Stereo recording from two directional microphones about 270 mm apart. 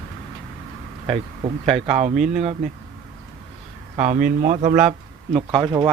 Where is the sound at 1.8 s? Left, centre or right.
Right.